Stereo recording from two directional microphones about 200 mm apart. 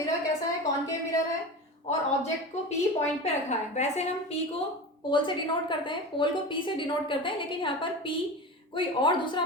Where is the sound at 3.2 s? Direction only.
35° left (ahead or behind).